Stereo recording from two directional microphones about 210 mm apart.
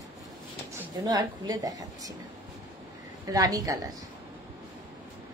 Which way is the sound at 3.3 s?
15° right (ahead or behind).